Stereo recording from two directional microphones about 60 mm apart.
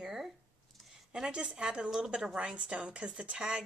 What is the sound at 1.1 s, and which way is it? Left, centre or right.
A woman's voice, centre.